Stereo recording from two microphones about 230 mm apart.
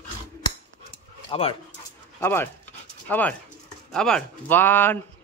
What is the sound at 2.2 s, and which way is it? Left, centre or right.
Speech, centre.